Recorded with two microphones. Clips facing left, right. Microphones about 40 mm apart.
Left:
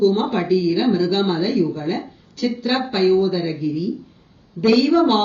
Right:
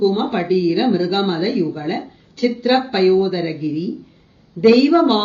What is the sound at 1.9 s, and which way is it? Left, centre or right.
A woman's voice, right.